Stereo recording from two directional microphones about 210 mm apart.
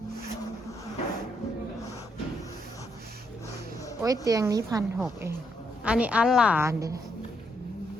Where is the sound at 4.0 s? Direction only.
15° right (ahead or behind).